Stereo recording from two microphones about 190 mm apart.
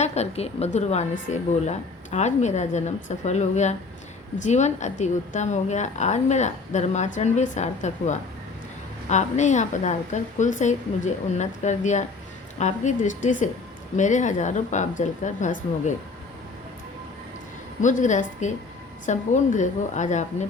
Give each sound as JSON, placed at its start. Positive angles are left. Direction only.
{"t": 0.0, "sound": "a woman's voice", "side_deg": 35}
{"t": 17.7, "sound": "a woman's voice", "side_deg": 40}